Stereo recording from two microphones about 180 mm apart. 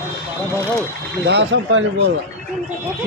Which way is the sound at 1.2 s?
80° right.